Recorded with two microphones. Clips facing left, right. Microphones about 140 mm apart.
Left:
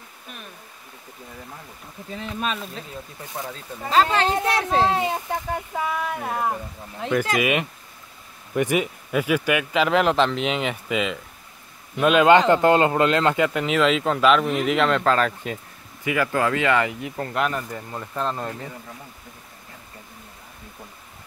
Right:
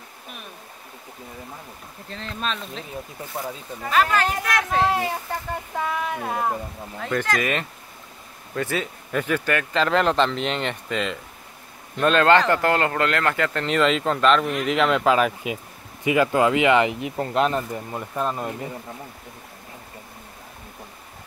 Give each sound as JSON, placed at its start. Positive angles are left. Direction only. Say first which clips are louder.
{"t": 2.0, "sound": "speech", "louder": "left 2 dB", "side_deg": 10}
{"t": 3.9, "sound": "speech", "louder": "left 2 dB", "side_deg": 25}
{"t": 5.8, "sound": "speech", "louder": "right 2 dB", "side_deg": 0}
{"t": 7.3, "sound": "speech", "louder": "left 3 dB", "side_deg": 10}
{"t": 16.0, "sound": "speech", "louder": "right 4 dB", "side_deg": -20}